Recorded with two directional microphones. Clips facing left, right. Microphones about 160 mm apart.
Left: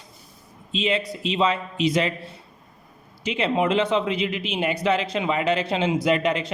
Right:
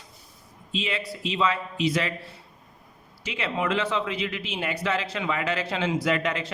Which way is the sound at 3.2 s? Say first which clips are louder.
Left 6 dB; 20° left (ahead or behind).